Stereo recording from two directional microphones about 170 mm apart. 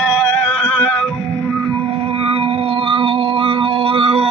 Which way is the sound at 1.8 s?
35° right (ahead or behind).